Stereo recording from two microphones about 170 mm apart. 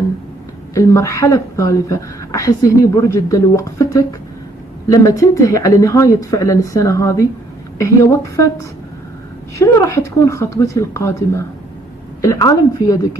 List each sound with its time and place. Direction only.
0.7 s a woman's voice: 15° left (ahead or behind)
9.6 s a woman's voice: 15° left (ahead or behind)